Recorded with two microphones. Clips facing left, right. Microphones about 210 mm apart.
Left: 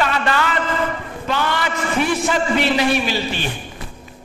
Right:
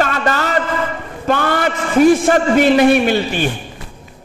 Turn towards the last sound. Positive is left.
turn(degrees=-55)  # may be behind; listen again after turning